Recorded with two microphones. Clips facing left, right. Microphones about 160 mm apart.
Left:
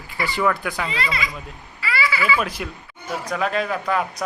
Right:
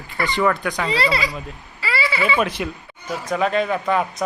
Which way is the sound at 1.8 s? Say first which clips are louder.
Right 1 dB; 30° right (ahead or behind).